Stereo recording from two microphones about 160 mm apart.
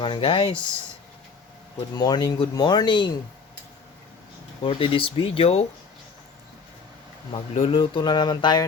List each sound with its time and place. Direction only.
0.0 s speech: 35° left (ahead or behind)
2.0 s speech: 25° left (ahead or behind)
4.6 s speech: 35° left (ahead or behind)
7.5 s speech: 35° left (ahead or behind)